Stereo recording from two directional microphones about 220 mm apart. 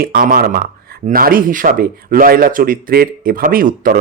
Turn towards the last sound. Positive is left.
turn(degrees=-40)  # may be behind; listen again after turning